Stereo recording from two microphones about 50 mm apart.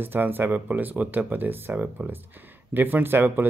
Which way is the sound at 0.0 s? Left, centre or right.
Right.